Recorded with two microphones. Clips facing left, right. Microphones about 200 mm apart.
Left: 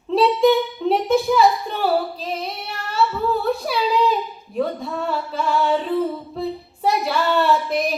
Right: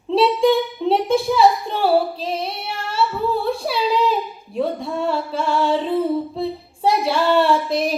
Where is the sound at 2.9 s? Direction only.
30° right (ahead or behind).